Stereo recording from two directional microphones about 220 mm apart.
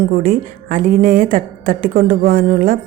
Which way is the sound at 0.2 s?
40° right (ahead or behind).